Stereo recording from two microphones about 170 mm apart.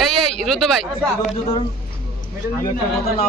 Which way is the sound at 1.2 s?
40° left (ahead or behind).